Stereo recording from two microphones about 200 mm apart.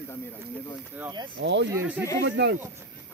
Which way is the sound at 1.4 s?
65° right (ahead or behind).